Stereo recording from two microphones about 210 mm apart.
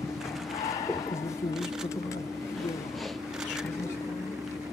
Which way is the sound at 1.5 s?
Centre (ahead or behind).